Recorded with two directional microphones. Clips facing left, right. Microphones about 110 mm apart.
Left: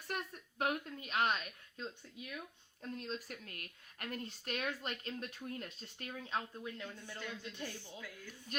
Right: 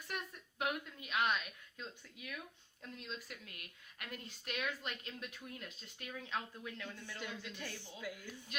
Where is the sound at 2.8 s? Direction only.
40° left (ahead or behind).